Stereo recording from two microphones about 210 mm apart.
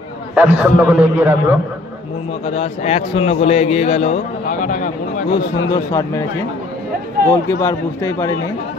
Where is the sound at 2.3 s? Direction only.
30° left (ahead or behind).